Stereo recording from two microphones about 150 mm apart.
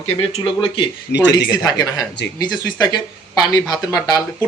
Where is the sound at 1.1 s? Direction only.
90° left.